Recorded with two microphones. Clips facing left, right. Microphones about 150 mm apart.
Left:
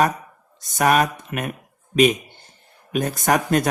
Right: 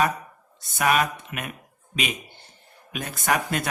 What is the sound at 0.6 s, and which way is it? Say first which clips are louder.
Speech: left 4 dB; 45° left (ahead or behind).